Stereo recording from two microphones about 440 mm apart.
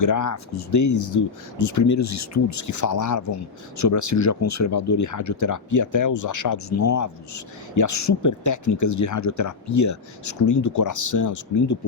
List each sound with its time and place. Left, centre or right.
0.0 s speech: left